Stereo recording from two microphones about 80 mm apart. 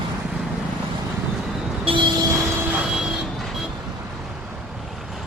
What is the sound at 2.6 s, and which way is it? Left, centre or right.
Vehicle, centre.